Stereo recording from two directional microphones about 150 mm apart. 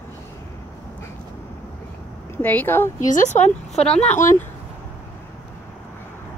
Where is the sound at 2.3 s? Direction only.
15° left (ahead or behind).